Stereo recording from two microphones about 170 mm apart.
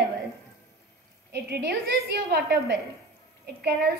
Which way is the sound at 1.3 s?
80° right.